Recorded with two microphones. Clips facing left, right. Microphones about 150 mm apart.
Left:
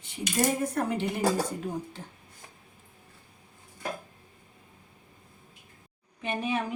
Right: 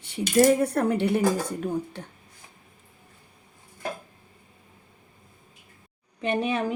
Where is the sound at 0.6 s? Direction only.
65° right (ahead or behind).